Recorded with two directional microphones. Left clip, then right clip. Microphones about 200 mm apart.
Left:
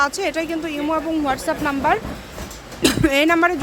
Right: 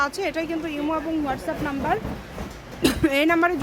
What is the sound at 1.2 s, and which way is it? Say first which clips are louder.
Speech: left 6 dB; 25° left (ahead or behind).